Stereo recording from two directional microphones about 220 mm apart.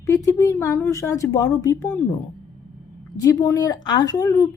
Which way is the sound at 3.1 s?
15° left (ahead or behind).